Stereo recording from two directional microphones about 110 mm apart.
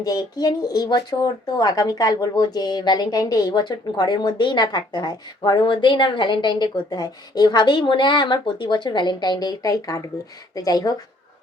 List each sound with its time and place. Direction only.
0.0 s speech: 35° left (ahead or behind)